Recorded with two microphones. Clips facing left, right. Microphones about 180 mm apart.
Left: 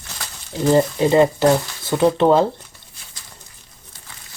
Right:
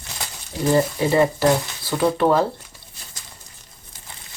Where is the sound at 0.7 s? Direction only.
20° left (ahead or behind).